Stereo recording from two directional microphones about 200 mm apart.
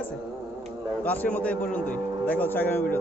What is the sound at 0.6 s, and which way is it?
Speech, 10° left (ahead or behind).